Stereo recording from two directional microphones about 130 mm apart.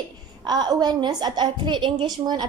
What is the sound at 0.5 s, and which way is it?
A woman's voice, 30° right (ahead or behind).